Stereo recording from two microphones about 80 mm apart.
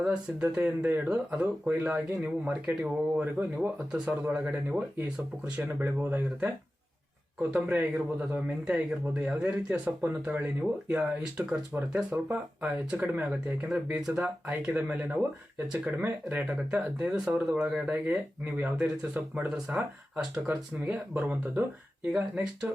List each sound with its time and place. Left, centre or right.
0.0 s speech: centre
7.5 s speech: right
13.7 s speech: centre